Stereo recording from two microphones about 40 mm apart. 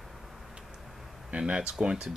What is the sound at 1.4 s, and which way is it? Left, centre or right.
Speech, right.